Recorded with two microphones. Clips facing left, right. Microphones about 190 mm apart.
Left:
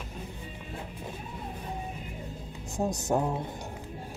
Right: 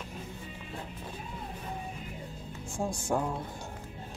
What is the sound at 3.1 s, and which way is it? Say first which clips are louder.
Speech: left 3 dB; 20° left (ahead or behind).